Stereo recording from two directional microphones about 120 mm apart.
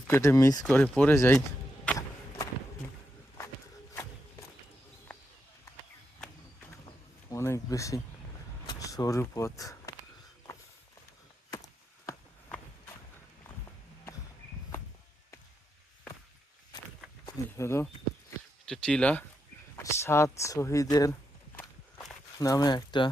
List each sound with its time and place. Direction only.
0.1 s speech: 25° left (ahead or behind)
0.6 s speech: 10° left (ahead or behind)
1.1 s speech: 25° left (ahead or behind)
6.8 s a sound: 25° left (ahead or behind)
8.6 s speech: 30° left (ahead or behind)
11.5 s a sound: 30° left (ahead or behind)
13.7 s walk: 25° left (ahead or behind)
17.2 s speech: 25° left (ahead or behind)
18.6 s speech: 5° left (ahead or behind)
19.8 s speech: 25° left (ahead or behind)
21.5 s walk: 15° left (ahead or behind)
22.4 s speech: 30° left (ahead or behind)